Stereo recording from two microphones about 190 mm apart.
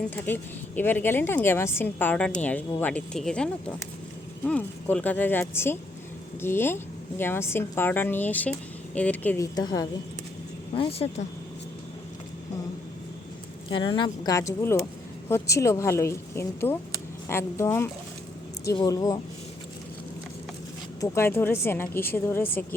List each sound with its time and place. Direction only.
0.8 s a woman's voice: 10° left (ahead or behind)
9.6 s speech: 20° left (ahead or behind)
10.8 s speech: 30° left (ahead or behind)
13.7 s a woman's voice: 25° left (ahead or behind)
21.0 s a woman's voice: 15° left (ahead or behind)